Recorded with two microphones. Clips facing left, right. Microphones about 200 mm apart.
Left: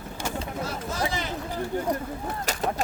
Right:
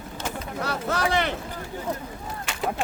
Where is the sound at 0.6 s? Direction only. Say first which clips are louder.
Right 5 dB; 70° right (ahead or behind).